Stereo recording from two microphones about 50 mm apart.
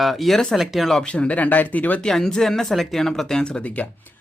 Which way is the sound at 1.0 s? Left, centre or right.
Left.